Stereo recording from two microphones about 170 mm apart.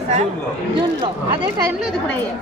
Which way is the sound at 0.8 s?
30° right (ahead or behind).